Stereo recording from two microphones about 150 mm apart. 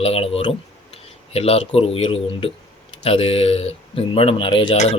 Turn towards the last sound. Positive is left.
turn(degrees=35)  # may be behind; listen again after turning